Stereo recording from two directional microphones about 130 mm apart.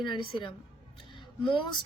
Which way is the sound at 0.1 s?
40° left (ahead or behind).